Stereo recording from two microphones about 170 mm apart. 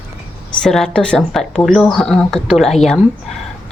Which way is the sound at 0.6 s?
Centre (ahead or behind).